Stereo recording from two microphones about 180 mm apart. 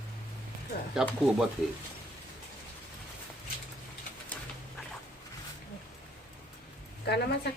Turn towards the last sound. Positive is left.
turn(degrees=65)  # may be behind; listen again after turning